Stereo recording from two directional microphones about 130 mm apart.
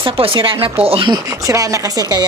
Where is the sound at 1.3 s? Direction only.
25° right (ahead or behind).